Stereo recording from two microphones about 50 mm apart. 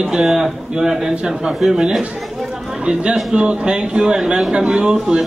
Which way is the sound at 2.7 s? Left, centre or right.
Right.